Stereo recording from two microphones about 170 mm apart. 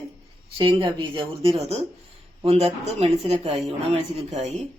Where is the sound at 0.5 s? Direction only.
30° right (ahead or behind).